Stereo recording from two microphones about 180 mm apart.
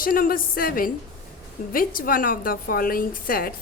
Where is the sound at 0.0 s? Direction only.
50° left (ahead or behind).